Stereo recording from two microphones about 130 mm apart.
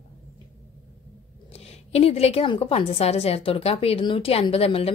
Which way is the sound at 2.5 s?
50° left (ahead or behind).